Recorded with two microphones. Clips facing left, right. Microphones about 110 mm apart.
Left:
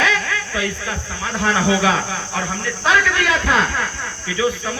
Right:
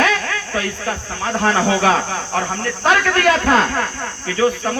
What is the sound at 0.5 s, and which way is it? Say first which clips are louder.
Speech: right 2 dB; 40° right (ahead or behind).